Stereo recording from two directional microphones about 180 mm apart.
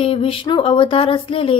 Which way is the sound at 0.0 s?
30° left (ahead or behind).